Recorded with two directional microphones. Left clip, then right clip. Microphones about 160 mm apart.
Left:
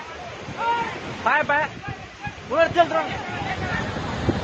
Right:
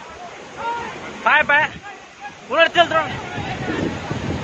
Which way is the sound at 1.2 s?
20° right (ahead or behind).